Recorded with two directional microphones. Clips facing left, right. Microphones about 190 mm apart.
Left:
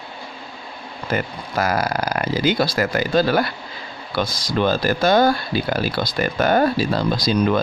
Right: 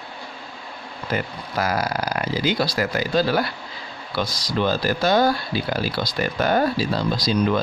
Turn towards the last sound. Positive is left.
turn(degrees=50)  # may be behind; listen again after turning